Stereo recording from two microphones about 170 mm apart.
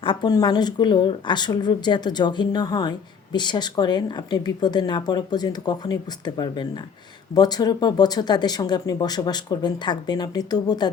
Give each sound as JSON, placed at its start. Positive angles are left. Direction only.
{"t": 0.0, "sound": "speech", "side_deg": 25}